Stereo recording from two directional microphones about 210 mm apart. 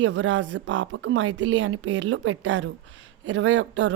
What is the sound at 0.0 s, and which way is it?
A woman's voice, 65° right (ahead or behind).